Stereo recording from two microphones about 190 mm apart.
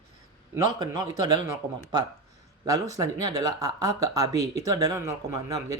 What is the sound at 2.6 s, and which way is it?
Speech, 20° right (ahead or behind).